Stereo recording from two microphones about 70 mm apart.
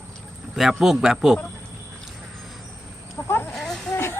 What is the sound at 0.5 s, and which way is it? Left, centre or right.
Speech, centre.